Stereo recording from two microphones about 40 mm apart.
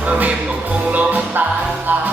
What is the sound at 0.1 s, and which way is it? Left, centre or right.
Music, right.